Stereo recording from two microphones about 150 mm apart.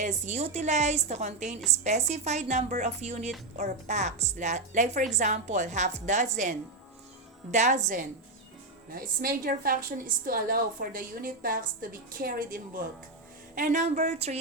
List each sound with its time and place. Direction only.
0.0 s speech: 50° right (ahead or behind)
9.0 s a woman's voice: 75° right (ahead or behind)
13.6 s speech: 55° right (ahead or behind)